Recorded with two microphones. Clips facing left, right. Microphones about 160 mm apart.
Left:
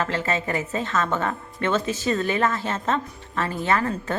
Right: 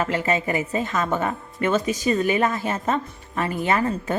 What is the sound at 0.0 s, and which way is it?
A woman's voice, 15° right (ahead or behind).